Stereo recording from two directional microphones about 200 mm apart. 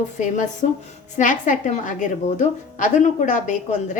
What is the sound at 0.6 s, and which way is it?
A woman's voice, 40° left (ahead or behind).